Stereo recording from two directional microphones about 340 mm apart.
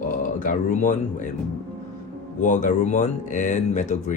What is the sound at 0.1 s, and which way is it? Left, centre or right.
Speech, left.